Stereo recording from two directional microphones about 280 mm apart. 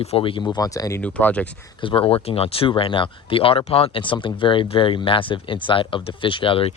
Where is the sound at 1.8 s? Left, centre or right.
Centre.